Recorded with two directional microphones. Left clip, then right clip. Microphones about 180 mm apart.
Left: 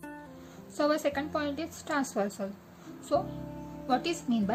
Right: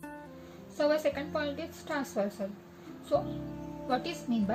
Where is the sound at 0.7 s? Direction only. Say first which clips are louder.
Even; 30° left (ahead or behind).